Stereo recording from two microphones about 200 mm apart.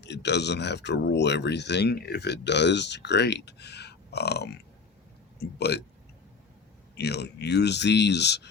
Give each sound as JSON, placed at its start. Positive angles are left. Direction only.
{"t": 0.0, "sound": "speech", "side_deg": 60}
{"t": 6.9, "sound": "speech", "side_deg": 55}